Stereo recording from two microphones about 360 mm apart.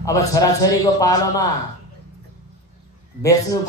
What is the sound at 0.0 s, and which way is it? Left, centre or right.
A man's voice, centre.